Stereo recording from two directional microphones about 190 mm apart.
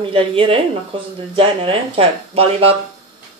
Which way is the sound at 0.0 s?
30° right (ahead or behind).